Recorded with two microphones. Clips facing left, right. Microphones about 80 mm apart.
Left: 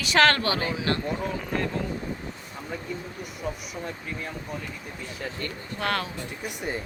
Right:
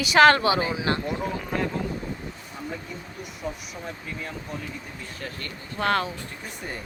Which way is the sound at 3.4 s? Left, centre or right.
Centre.